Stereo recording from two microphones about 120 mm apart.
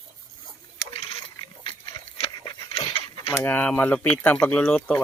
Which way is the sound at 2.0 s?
35° left (ahead or behind).